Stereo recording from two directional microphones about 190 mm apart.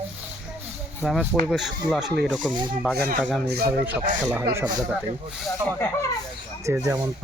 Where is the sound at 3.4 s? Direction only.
60° right (ahead or behind).